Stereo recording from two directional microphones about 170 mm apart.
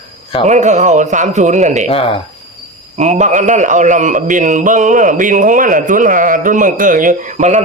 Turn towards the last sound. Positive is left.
turn(degrees=-45)  # may be behind; listen again after turning